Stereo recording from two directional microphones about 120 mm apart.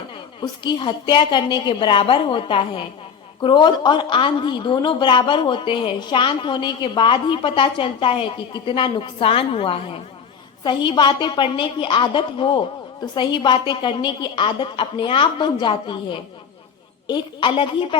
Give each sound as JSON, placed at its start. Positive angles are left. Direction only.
{"t": 0.6, "sound": "a woman's voice", "side_deg": 40}